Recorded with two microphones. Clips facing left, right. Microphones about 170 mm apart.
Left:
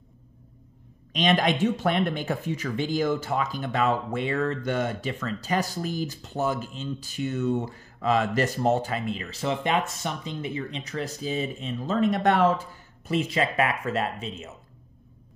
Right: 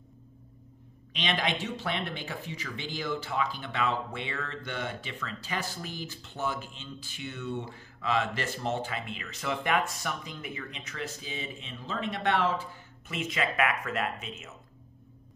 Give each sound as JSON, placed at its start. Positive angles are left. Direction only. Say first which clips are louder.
{"t": 1.1, "sound": "speech", "louder": "left 8 dB", "side_deg": 45}